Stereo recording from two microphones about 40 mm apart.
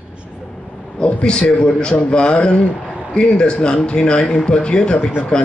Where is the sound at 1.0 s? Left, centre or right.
Left.